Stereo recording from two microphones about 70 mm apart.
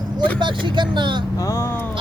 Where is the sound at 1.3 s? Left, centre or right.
Left.